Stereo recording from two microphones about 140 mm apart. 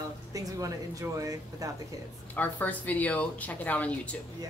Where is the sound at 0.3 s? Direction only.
25° right (ahead or behind).